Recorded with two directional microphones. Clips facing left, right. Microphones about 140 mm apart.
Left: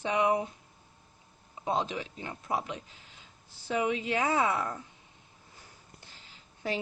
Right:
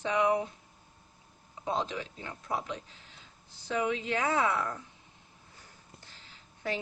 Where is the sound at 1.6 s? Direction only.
10° left (ahead or behind).